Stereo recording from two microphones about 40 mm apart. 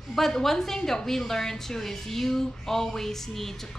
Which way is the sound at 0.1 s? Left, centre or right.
Centre.